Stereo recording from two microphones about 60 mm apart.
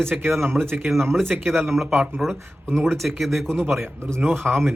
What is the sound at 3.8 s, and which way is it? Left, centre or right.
Speech, right.